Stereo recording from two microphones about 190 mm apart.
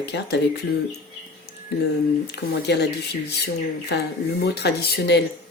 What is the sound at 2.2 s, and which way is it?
Speech, 60° left (ahead or behind).